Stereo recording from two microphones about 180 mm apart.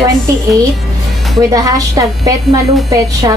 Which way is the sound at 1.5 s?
20° right (ahead or behind).